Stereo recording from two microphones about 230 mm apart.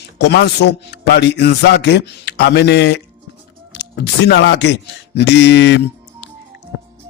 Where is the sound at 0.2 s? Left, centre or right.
Left.